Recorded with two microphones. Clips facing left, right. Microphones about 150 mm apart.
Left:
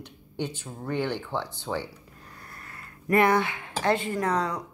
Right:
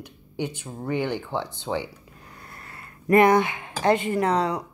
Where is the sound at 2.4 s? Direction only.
25° right (ahead or behind).